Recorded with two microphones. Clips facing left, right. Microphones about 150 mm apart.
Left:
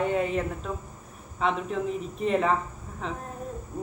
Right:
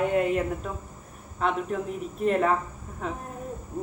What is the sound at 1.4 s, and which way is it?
Speech, centre (ahead or behind).